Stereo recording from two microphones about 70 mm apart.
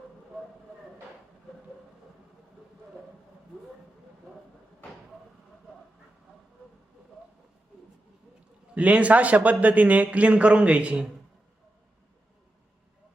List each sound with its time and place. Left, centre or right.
8.7 s a man's voice: centre